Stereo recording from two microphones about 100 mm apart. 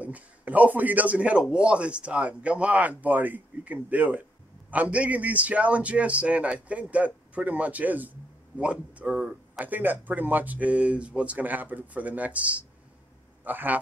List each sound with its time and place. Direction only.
0.0 s a man's voice: 15° right (ahead or behind)